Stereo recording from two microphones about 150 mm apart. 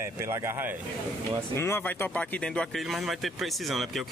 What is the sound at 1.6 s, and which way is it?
Speech, 15° left (ahead or behind).